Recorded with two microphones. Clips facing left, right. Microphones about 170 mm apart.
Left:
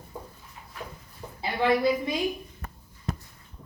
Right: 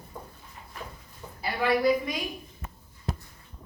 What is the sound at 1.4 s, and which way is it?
Speech, 25° left (ahead or behind).